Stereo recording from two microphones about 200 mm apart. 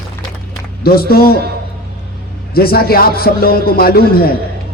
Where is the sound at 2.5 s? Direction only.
50° left (ahead or behind).